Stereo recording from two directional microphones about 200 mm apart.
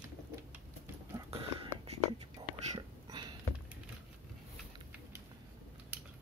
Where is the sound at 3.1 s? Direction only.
20° right (ahead or behind).